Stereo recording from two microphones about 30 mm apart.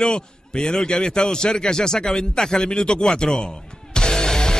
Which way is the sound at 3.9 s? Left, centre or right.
Left.